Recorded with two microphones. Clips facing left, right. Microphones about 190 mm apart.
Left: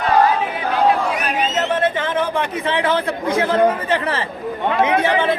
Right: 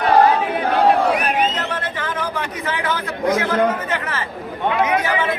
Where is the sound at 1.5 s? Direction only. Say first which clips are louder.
Left 7 dB; 25° left (ahead or behind).